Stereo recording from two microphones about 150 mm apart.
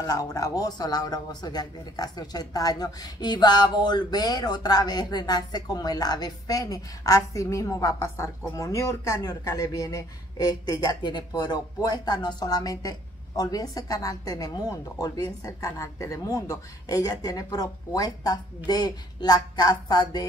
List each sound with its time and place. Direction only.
0.0 s speech: 25° left (ahead or behind)